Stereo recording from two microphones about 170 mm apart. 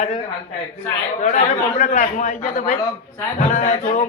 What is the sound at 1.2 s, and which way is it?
Speech, 45° left (ahead or behind).